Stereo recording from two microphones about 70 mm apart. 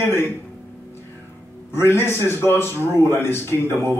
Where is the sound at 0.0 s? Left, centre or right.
Left.